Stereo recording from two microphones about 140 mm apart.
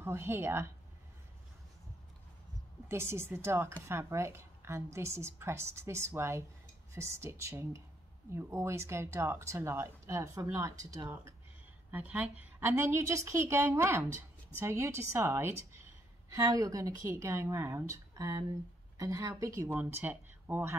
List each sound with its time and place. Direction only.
0.0 s a woman's voice: 20° right (ahead or behind)
2.9 s a woman's voice: 20° right (ahead or behind)
11.9 s a woman's voice: 10° right (ahead or behind)